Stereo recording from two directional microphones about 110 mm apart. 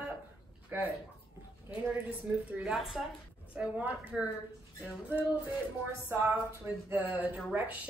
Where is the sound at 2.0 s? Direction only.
15° right (ahead or behind).